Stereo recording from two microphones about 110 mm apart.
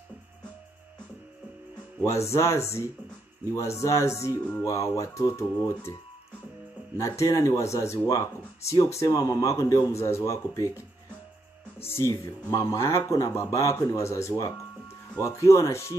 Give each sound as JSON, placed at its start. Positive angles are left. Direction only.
{"t": 2.0, "sound": "speech", "side_deg": 25}
{"t": 7.0, "sound": "speech", "side_deg": 30}
{"t": 11.8, "sound": "speech", "side_deg": 20}